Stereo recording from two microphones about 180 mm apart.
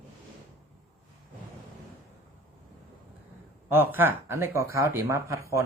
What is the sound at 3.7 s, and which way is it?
Speech, 10° right (ahead or behind).